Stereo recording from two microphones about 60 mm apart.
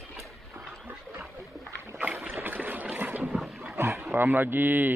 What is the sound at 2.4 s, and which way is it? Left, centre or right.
Boat, right.